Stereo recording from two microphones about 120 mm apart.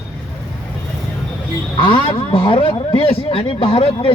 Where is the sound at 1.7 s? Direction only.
45° left (ahead or behind).